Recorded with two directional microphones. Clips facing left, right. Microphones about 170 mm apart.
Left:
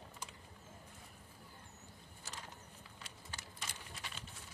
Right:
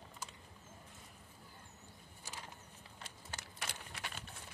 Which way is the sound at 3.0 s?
55° right (ahead or behind).